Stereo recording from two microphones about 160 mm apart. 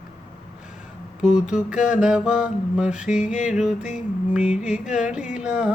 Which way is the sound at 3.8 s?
50° left (ahead or behind).